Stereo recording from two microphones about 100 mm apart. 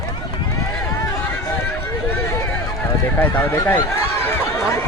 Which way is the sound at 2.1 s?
20° left (ahead or behind).